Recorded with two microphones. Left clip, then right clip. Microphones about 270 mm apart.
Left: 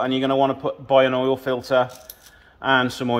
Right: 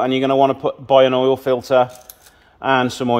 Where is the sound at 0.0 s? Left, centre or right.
Right.